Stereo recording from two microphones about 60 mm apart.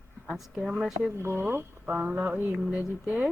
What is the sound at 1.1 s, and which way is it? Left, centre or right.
Speech, right.